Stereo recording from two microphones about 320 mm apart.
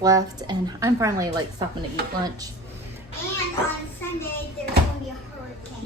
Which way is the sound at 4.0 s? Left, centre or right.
Centre.